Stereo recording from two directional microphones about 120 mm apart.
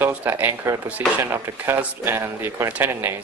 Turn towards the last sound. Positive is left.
turn(degrees=-20)  # may be behind; listen again after turning